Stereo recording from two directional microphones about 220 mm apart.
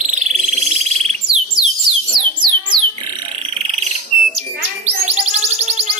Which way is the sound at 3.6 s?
30° right (ahead or behind).